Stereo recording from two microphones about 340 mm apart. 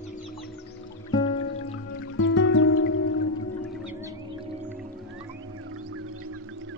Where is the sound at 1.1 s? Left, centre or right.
Centre.